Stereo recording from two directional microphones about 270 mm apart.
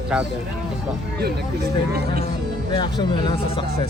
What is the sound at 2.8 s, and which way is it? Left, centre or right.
Speech, centre.